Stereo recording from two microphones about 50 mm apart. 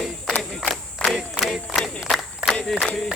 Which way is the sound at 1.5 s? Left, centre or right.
Centre.